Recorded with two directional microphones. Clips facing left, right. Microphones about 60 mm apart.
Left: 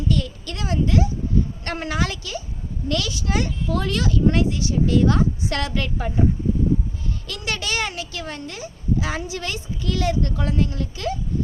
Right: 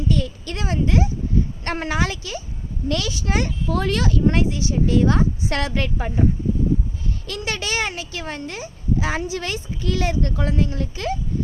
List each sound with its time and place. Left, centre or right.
0.1 s a woman's voice: right
7.3 s speech: right